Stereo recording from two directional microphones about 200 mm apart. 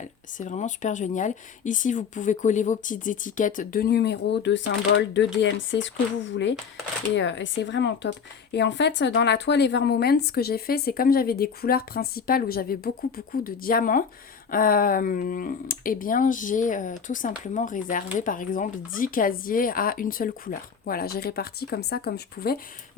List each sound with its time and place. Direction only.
0.3 s speech: 35° left (ahead or behind)